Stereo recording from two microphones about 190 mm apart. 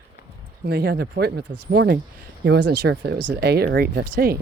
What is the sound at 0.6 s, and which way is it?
Speech, 60° right (ahead or behind).